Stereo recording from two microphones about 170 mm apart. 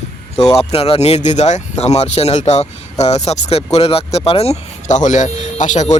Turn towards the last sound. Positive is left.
turn(degrees=45)  # may be behind; listen again after turning